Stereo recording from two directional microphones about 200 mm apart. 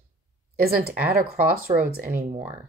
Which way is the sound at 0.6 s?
50° right (ahead or behind).